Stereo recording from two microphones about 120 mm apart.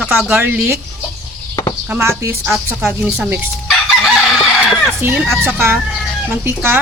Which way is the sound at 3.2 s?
15° right (ahead or behind).